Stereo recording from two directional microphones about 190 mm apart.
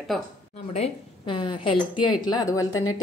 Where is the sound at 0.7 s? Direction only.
30° left (ahead or behind).